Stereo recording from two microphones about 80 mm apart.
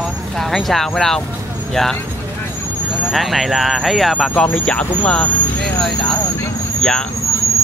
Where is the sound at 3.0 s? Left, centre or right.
Centre.